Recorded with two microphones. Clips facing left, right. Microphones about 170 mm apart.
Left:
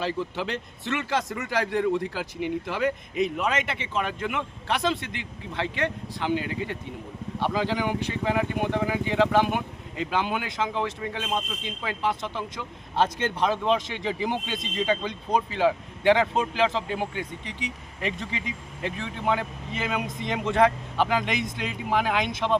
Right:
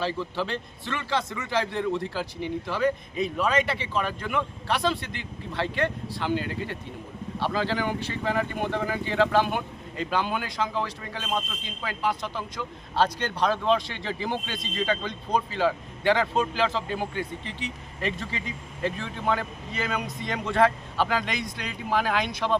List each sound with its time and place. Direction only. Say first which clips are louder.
0.0 s speech: even; 15° left (ahead or behind)
1.5 s speech: left 3 dB; 10° left (ahead or behind)